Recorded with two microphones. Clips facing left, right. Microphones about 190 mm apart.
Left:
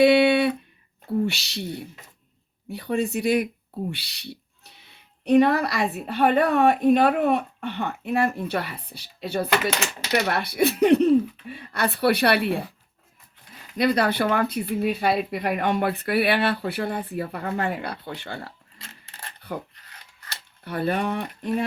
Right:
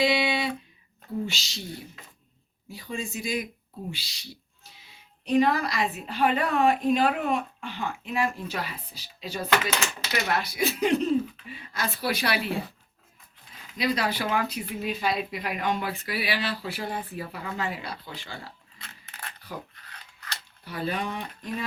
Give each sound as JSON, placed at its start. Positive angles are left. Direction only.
{"t": 0.0, "sound": "a sound", "side_deg": 60}
{"t": 1.2, "sound": "speech", "side_deg": 65}
{"t": 13.7, "sound": "speech", "side_deg": 55}
{"t": 18.8, "sound": "coin", "side_deg": 25}
{"t": 19.5, "sound": "speech", "side_deg": 55}
{"t": 20.7, "sound": "speech", "side_deg": 60}